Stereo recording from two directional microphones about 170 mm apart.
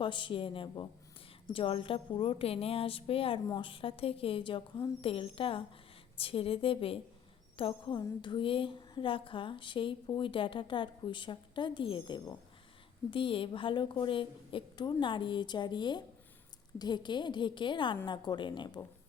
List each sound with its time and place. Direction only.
0.0 s a woman's voice: 30° left (ahead or behind)